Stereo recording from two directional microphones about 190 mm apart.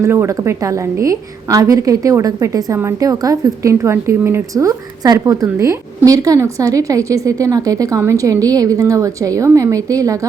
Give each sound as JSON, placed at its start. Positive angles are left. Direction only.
{"t": 0.0, "sound": "a woman's voice", "side_deg": -15}